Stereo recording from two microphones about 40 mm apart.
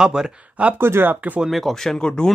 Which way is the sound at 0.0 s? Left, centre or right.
Centre.